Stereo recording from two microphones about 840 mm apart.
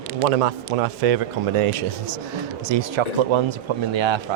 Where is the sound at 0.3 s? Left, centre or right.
Right.